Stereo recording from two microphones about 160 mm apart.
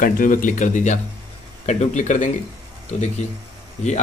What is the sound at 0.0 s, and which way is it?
A man's voice, 55° left (ahead or behind).